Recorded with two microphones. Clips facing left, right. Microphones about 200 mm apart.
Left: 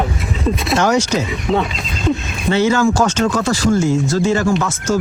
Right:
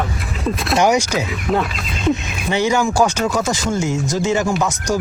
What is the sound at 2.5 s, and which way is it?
Speech, 15° right (ahead or behind).